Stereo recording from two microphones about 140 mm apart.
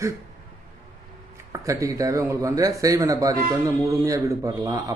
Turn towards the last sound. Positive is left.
turn(degrees=-25)  # may be behind; listen again after turning